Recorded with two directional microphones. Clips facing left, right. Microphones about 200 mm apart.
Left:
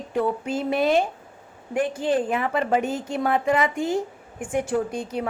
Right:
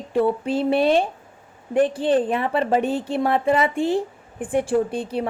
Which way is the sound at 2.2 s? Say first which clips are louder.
Right 2 dB; 35° right (ahead or behind).